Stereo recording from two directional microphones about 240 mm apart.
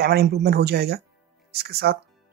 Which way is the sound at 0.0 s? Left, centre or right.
Right.